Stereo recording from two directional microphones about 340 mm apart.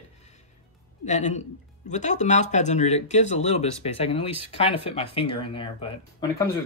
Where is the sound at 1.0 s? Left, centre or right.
Left.